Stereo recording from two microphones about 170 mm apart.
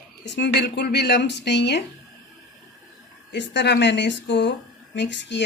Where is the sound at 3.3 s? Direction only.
90° left.